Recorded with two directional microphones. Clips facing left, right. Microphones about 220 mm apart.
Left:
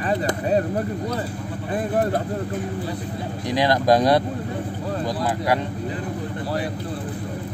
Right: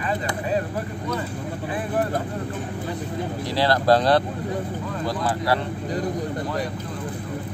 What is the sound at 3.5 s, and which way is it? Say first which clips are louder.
Speech: left 1 dB; 15° left (ahead or behind).